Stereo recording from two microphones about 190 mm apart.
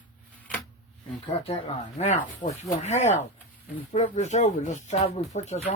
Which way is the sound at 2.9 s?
35° left (ahead or behind).